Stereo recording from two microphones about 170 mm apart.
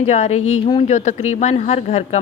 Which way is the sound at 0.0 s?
40° left (ahead or behind).